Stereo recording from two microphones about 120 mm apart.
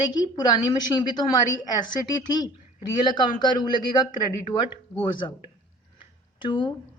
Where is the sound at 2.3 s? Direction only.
35° left (ahead or behind).